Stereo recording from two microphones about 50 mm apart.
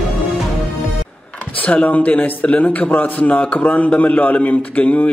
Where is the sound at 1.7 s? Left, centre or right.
Left.